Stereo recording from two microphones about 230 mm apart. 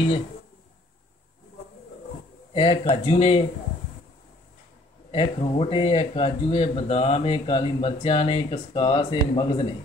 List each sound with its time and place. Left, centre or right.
2.5 s speech: left
5.1 s speech: left